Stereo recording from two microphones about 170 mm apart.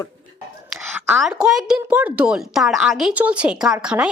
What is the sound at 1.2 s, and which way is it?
A woman's voice, centre (ahead or behind).